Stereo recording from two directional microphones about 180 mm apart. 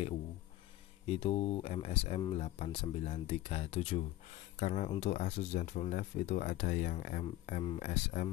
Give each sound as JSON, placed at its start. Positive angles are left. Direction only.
{"t": 1.0, "sound": "speech", "side_deg": 35}